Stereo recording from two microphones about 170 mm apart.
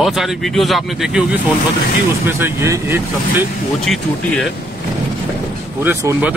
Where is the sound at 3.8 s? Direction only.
Centre (ahead or behind).